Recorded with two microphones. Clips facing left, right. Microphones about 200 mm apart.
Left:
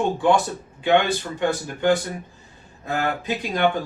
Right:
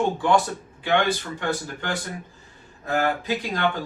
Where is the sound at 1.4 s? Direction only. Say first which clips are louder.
Left 5 dB; 20° left (ahead or behind).